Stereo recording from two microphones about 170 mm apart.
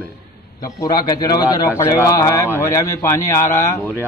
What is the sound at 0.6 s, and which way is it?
A man's voice, 25° left (ahead or behind).